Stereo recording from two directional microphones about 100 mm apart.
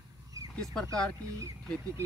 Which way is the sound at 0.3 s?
35° right (ahead or behind).